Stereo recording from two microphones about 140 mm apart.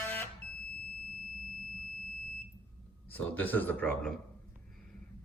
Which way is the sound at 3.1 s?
15° left (ahead or behind).